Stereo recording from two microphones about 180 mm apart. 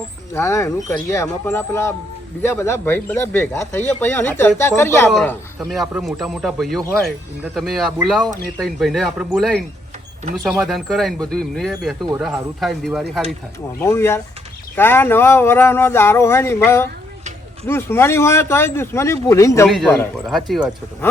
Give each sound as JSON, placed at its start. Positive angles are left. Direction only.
{"t": 0.3, "sound": "speech", "side_deg": 15}
{"t": 5.5, "sound": "speech", "side_deg": 0}
{"t": 13.7, "sound": "speech", "side_deg": 15}
{"t": 19.6, "sound": "speech", "side_deg": 0}